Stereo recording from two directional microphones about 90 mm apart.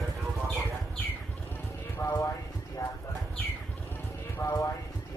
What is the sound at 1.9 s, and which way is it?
Clip-clop, 35° left (ahead or behind).